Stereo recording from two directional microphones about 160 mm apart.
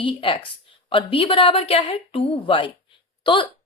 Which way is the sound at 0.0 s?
35° left (ahead or behind).